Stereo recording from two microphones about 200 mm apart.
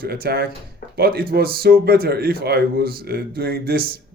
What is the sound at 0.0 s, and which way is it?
A man's voice, 50° right (ahead or behind).